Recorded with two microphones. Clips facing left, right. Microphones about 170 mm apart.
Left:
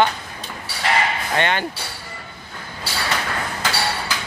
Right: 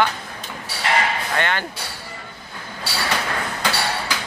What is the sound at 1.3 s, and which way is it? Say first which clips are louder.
Speech: left 3 dB; 20° left (ahead or behind).